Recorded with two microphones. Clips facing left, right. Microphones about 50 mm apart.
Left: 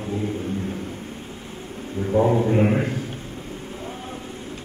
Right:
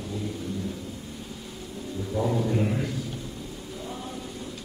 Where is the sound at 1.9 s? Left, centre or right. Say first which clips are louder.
Left 8 dB; left.